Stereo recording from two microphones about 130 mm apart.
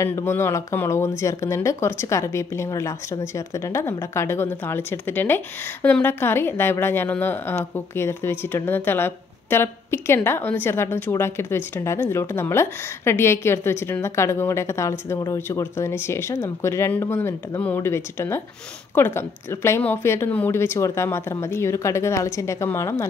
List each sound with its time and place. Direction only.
0.0 s a woman's voice: 20° left (ahead or behind)